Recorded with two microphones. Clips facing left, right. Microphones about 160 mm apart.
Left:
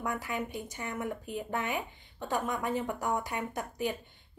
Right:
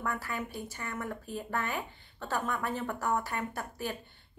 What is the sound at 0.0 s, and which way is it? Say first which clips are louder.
A woman's voice: left 1 dB; 15° left (ahead or behind).